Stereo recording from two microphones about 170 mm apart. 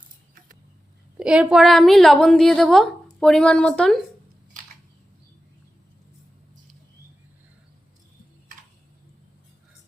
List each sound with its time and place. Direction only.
1.2 s a woman's voice: 5° right (ahead or behind)